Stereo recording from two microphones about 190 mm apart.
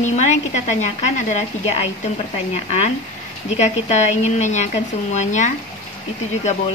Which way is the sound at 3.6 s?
40° left (ahead or behind).